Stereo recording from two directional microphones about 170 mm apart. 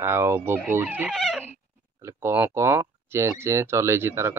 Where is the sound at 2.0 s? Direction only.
15° right (ahead or behind).